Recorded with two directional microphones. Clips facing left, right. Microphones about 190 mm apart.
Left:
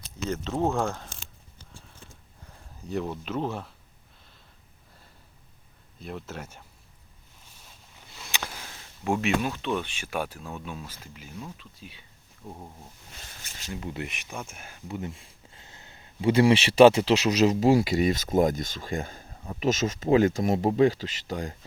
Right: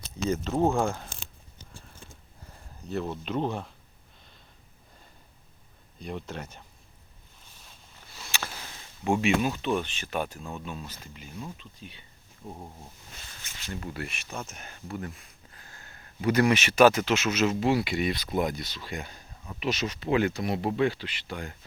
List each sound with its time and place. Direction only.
0.3 s speech: 5° right (ahead or behind)
2.9 s speech: 10° left (ahead or behind)
6.0 s speech: 5° left (ahead or behind)
8.5 s a sound: centre (ahead or behind)
9.2 s speech: 5° right (ahead or behind)
9.8 s speech: 10° left (ahead or behind)
12.5 s speech: 5° right (ahead or behind)
13.7 s speech: 15° left (ahead or behind)
14.8 s speech: 20° left (ahead or behind); by 21.6 s 35° left (ahead or behind)